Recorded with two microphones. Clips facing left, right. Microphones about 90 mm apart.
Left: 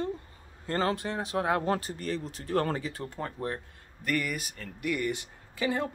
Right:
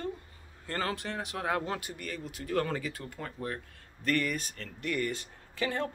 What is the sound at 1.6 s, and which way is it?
Speech, 35° left (ahead or behind).